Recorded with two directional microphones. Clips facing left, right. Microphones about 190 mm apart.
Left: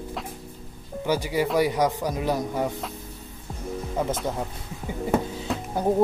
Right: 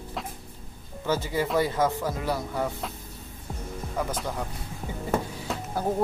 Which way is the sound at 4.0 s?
25° left (ahead or behind).